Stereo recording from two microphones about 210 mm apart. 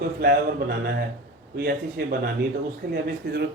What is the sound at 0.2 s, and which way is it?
Speech, 45° right (ahead or behind).